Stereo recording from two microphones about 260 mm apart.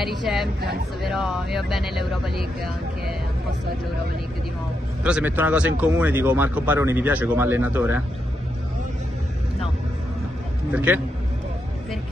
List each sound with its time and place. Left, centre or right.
0.0 s speech: centre
0.6 s speech: right
1.0 s speech: centre
5.0 s speech: centre
10.7 s speech: centre